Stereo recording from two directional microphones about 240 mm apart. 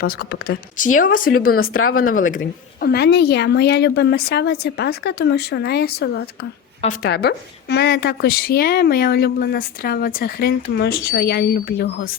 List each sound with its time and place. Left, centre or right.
0.0 s a woman's voice: left
1.7 s speech: left
2.0 s a woman's voice: left